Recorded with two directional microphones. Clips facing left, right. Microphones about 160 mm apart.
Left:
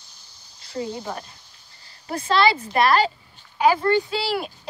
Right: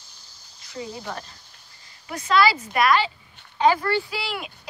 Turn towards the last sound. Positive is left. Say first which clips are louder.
# left 5 dB
turn(degrees=35)  # may be behind; listen again after turning